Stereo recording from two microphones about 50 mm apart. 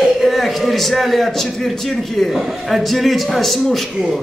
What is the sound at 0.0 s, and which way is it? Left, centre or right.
A man's voice, centre.